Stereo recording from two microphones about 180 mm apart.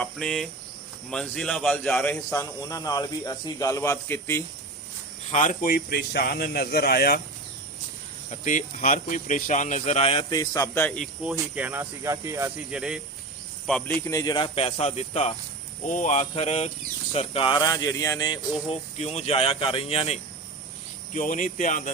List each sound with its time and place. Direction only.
0.0 s a man's voice: 5° left (ahead or behind)
2.3 s a man's voice: 20° left (ahead or behind)
5.3 s speech: 45° left (ahead or behind); by 7.2 s 60° left (ahead or behind)
8.3 s speech: 45° left (ahead or behind); by 11.1 s 5° left (ahead or behind)
11.2 s speech: 10° right (ahead or behind)
12.7 s a man's voice: 5° right (ahead or behind)
14.0 s speech: 20° left (ahead or behind)
18.7 s speech: 35° left (ahead or behind)
21.1 s speech: 45° left (ahead or behind)